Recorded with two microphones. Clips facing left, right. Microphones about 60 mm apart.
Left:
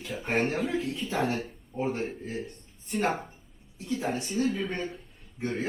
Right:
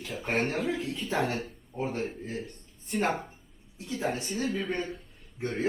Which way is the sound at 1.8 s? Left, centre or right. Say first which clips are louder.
Left 2 dB; centre.